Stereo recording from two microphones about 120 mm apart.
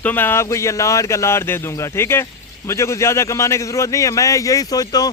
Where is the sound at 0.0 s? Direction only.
15° left (ahead or behind).